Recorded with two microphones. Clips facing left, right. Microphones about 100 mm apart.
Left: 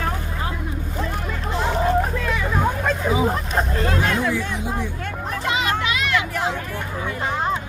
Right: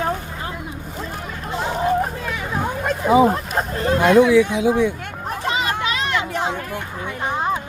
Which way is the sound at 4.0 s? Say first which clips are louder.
Right 13 dB; 85° right.